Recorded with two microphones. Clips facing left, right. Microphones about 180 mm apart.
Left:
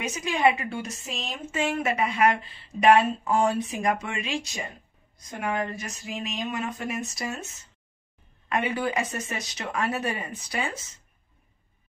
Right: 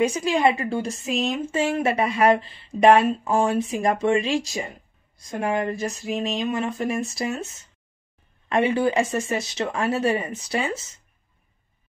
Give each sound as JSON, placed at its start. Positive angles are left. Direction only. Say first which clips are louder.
{"t": 0.0, "sound": "a woman's voice", "louder": "right 4 dB", "side_deg": -35}
{"t": 8.5, "sound": "speech", "louder": "right 7 dB", "side_deg": -30}